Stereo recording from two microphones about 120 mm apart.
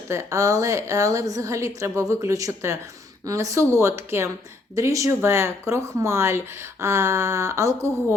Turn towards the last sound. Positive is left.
turn(degrees=-25)  # may be behind; listen again after turning